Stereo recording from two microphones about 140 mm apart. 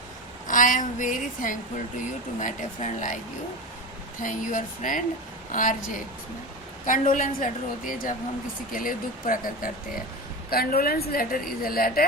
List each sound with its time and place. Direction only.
0.4 s a woman's voice: 70° left (ahead or behind)
4.2 s a woman's voice: 70° left (ahead or behind)
6.8 s a woman's voice: 70° left (ahead or behind); by 12.0 s 90° left